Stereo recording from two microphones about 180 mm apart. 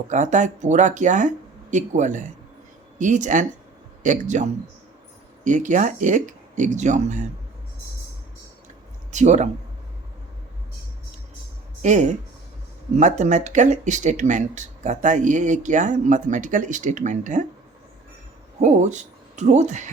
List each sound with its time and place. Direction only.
0.1 s speech: 45° right (ahead or behind)
9.1 s speech: 40° right (ahead or behind)
11.8 s speech: 40° right (ahead or behind)
18.6 s speech: 40° right (ahead or behind)